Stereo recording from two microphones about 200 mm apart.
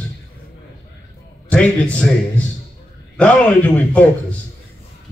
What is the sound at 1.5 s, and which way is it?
A man's voice, 5° left (ahead or behind).